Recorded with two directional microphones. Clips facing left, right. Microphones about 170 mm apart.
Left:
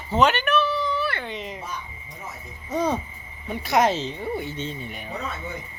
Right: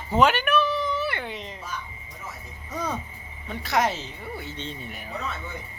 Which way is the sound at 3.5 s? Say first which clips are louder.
Left 4 dB; 15° left (ahead or behind).